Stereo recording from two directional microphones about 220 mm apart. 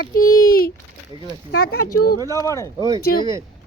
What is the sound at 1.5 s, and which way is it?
Speech, 45° left (ahead or behind).